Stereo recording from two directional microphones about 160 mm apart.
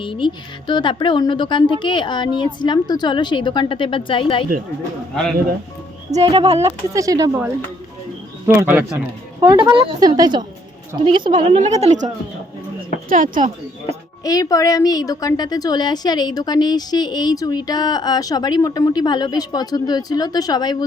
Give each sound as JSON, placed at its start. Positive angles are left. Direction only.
{"t": 0.0, "sound": "a woman's voice", "side_deg": 30}
{"t": 6.1, "sound": "speech", "side_deg": -40}
{"t": 6.6, "sound": "a woman's voice", "side_deg": -20}
{"t": 8.4, "sound": "speech", "side_deg": -15}
{"t": 9.4, "sound": "a woman's voice", "side_deg": -25}
{"t": 11.4, "sound": "a woman's voice", "side_deg": -40}
{"t": 13.1, "sound": "speech", "side_deg": -55}
{"t": 14.3, "sound": "a woman's voice", "side_deg": 20}